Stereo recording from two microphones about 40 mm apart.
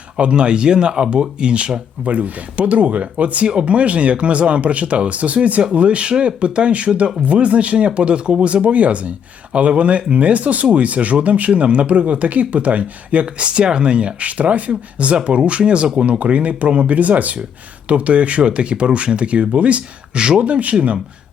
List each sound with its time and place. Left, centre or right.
0.2 s speech: right
2.0 s speech: right